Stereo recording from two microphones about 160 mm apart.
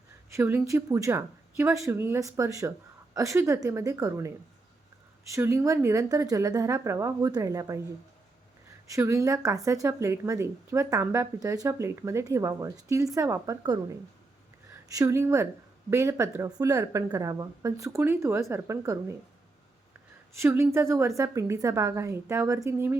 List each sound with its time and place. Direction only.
0.3 s a woman's voice: 15° right (ahead or behind)
9.0 s a woman's voice: 20° right (ahead or behind)
20.3 s a woman's voice: 15° right (ahead or behind)